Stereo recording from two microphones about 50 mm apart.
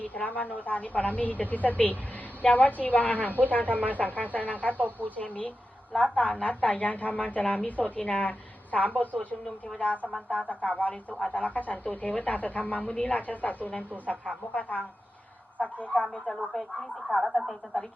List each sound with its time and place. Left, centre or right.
0.0 s speech: left
4.7 s speech: right
5.1 s a woman's voice: left
16.5 s speech: centre
17.2 s a woman's voice: centre